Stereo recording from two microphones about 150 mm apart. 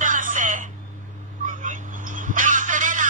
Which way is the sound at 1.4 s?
60° right (ahead or behind).